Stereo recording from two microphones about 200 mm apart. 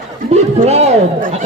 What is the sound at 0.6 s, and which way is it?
Speech, 30° right (ahead or behind).